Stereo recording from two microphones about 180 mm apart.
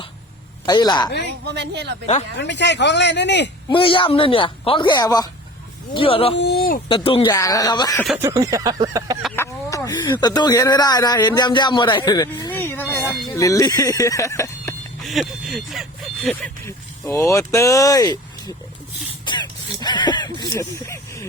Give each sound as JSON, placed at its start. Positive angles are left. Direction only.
{"t": 0.6, "sound": "speech", "side_deg": 20}
{"t": 1.5, "sound": "speech", "side_deg": -70}
{"t": 2.4, "sound": "speech", "side_deg": 75}
{"t": 3.7, "sound": "speech", "side_deg": 30}
{"t": 6.3, "sound": "speech", "side_deg": 70}
{"t": 6.8, "sound": "speech", "side_deg": 30}
{"t": 8.2, "sound": "a sound", "side_deg": -15}
{"t": 9.3, "sound": "speech", "side_deg": 15}
{"t": 15.0, "sound": "speech", "side_deg": 0}
{"t": 16.6, "sound": "vehicle", "side_deg": 15}
{"t": 17.3, "sound": "speech", "side_deg": 15}
{"t": 19.2, "sound": "a sound", "side_deg": 25}